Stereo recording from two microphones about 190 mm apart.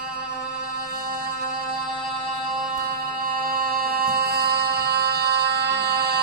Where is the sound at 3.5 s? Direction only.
50° right (ahead or behind).